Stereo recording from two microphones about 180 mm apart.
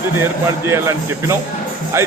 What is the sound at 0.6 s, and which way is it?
Speech, 15° right (ahead or behind).